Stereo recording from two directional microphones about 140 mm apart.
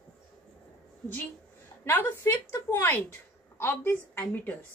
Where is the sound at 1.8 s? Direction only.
15° left (ahead or behind).